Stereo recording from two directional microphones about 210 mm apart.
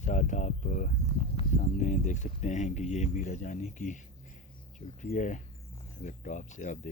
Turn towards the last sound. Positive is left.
turn(degrees=35)  # may be behind; listen again after turning